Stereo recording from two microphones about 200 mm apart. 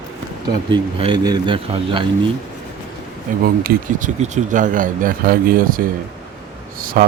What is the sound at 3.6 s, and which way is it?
Speech, 40° right (ahead or behind).